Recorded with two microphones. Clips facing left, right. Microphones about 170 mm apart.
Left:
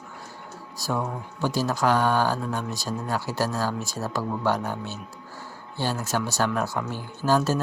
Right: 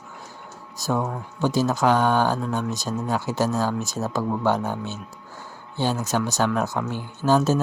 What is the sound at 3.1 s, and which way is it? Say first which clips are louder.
Speech: right 4 dB; 20° right (ahead or behind).